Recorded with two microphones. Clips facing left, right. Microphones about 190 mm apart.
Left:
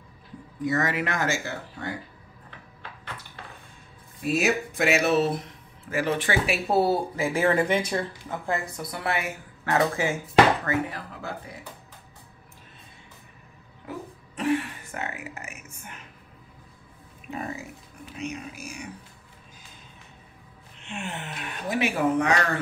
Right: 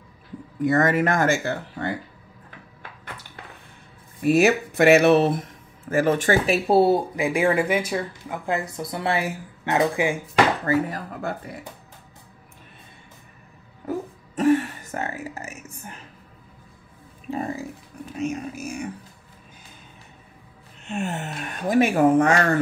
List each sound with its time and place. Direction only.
0.7 s speech: 50° right (ahead or behind)
4.2 s speech: 60° right (ahead or behind); by 6.6 s 40° right (ahead or behind)
6.7 s speech: 20° right (ahead or behind)
8.7 s speech: 25° right (ahead or behind)
9.8 s speech: 15° right (ahead or behind)
10.6 s speech: 35° right (ahead or behind)
13.8 s a sound: 45° right (ahead or behind)
17.3 s speech: 30° right (ahead or behind)
18.1 s speech: 45° right (ahead or behind)
20.8 s speech: 40° right (ahead or behind)